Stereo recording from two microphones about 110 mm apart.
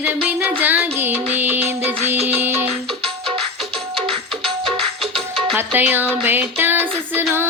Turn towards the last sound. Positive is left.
turn(degrees=-20)  # may be behind; listen again after turning